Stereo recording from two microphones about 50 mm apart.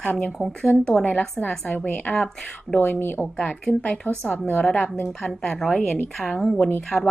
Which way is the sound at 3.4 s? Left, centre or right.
Left.